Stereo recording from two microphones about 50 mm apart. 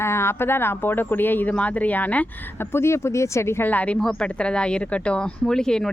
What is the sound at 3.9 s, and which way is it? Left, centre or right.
Speech, centre.